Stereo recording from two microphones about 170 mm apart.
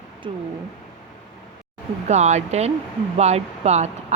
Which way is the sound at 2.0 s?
40° right (ahead or behind).